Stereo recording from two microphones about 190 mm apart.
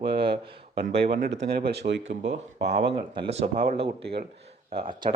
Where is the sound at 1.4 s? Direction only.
55° right (ahead or behind).